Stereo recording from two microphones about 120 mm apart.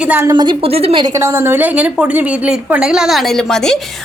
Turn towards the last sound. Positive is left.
turn(degrees=5)  # may be behind; listen again after turning